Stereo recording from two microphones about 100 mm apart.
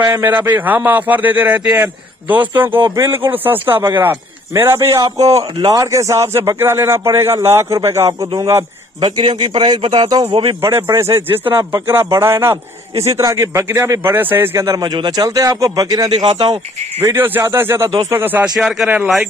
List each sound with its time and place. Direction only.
0.2 s a man's voice: 20° right (ahead or behind)
9.0 s a man's voice: 50° right (ahead or behind)
10.6 s speech: 30° right (ahead or behind)
17.0 s speech: 25° right (ahead or behind)
18.6 s speech: centre (ahead or behind)